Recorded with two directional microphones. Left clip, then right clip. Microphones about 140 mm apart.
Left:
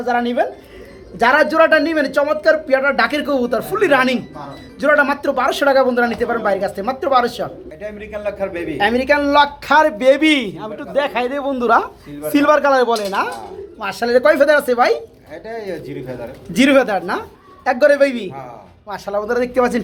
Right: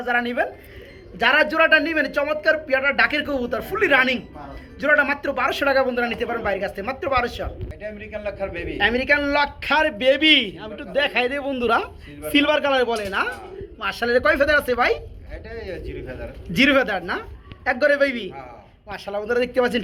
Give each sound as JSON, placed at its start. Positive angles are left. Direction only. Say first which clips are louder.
{"t": 0.0, "sound": "a man's voice", "louder": "left 5 dB", "side_deg": 15}
{"t": 7.8, "sound": "a man's voice", "louder": "left 4 dB", "side_deg": 30}
{"t": 8.8, "sound": "speech", "louder": "left 4 dB", "side_deg": 5}
{"t": 15.4, "sound": "a man's voice", "louder": "left 6 dB", "side_deg": 25}
{"t": 16.5, "sound": "a man's voice", "louder": "left 4 dB", "side_deg": 10}